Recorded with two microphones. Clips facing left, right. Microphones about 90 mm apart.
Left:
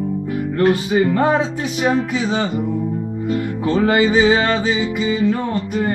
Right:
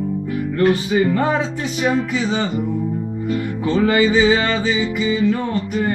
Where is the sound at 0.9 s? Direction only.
45° left (ahead or behind).